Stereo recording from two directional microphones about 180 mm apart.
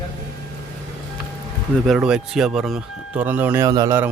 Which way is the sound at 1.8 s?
5° right (ahead or behind).